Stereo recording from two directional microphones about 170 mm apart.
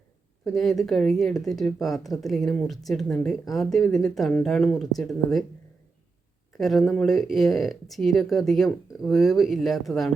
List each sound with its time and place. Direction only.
0.4 s speech: centre (ahead or behind)
6.6 s speech: centre (ahead or behind)